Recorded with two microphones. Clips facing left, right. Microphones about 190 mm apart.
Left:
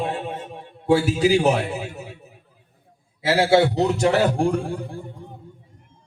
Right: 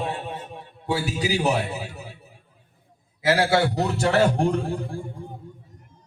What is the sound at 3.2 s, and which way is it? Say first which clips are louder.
Speech: left 3 dB; 25° left (ahead or behind).